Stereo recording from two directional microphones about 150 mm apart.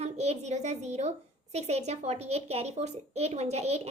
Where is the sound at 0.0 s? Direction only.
45° right (ahead or behind).